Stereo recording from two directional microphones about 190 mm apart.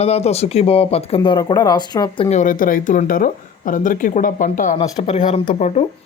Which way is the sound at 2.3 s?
45° left (ahead or behind).